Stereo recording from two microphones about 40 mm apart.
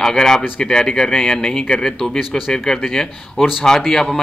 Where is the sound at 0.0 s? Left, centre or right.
Centre.